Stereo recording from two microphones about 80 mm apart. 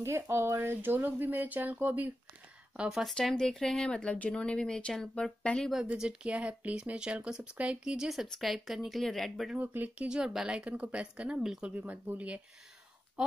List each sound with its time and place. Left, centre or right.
0.0 s speech: right
2.9 s speech: centre
5.9 s speech: centre
9.6 s speech: centre
11.7 s speech: right